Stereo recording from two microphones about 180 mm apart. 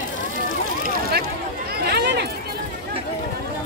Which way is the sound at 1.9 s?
65° right (ahead or behind).